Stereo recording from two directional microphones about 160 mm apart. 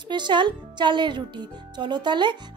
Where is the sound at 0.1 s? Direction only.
30° right (ahead or behind).